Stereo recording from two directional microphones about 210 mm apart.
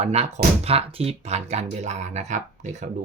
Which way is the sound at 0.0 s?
30° right (ahead or behind).